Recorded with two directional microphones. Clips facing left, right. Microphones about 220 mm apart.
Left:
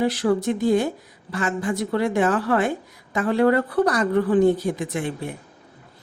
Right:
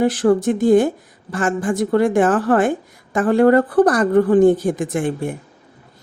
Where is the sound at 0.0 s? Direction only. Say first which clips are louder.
Right 5 dB; 50° right (ahead or behind).